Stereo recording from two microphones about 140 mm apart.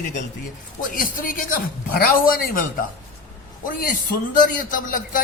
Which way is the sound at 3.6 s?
90° left.